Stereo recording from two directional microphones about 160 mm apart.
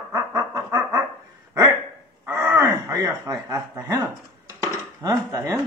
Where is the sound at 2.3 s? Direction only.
10° right (ahead or behind).